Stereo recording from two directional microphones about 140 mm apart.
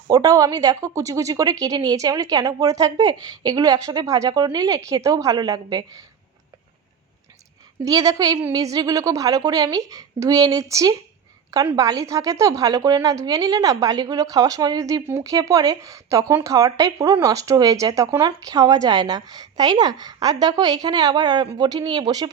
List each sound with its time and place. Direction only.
0.1 s a woman's voice: 25° right (ahead or behind)
7.9 s a woman's voice: 25° right (ahead or behind)